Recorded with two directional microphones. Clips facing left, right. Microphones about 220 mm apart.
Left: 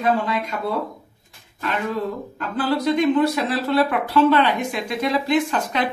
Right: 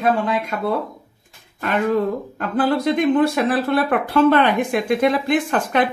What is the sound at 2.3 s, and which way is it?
A woman's voice, 50° right (ahead or behind).